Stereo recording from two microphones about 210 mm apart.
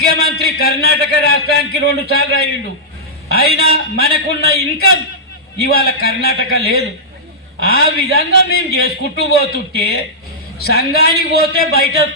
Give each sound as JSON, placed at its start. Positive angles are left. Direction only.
{"t": 0.0, "sound": "a man's voice", "side_deg": 50}